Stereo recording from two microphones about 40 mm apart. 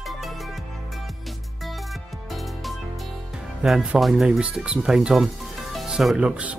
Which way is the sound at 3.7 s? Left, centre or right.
Centre.